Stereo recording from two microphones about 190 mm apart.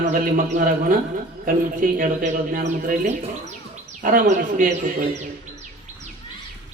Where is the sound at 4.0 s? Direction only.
45° right (ahead or behind).